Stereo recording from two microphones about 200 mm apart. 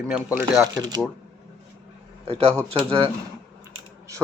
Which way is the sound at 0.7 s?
20° right (ahead or behind).